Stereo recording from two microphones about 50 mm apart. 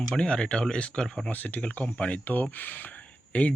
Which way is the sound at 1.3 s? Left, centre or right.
Left.